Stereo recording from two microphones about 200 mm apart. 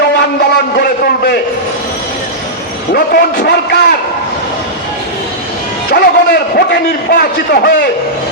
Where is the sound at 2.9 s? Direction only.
50° left (ahead or behind).